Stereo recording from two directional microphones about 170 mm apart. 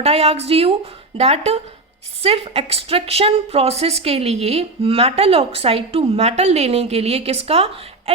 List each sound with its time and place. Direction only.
0.0 s a woman's voice: 40° right (ahead or behind)